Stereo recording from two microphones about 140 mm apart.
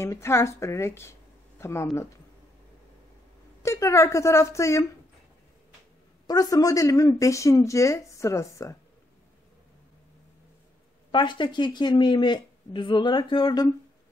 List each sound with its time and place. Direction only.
0.0 s a woman's voice: 20° left (ahead or behind)
3.6 s a woman's voice: 20° left (ahead or behind)
6.2 s a woman's voice: 25° left (ahead or behind)
11.1 s speech: 35° left (ahead or behind)